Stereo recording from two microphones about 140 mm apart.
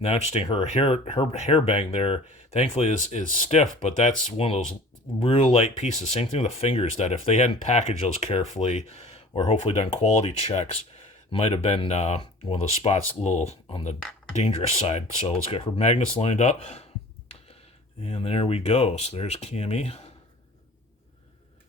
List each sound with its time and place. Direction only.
0.0 s speech: 45° left (ahead or behind)
5.5 s speech: 55° left (ahead or behind)
18.0 s speech: 45° left (ahead or behind)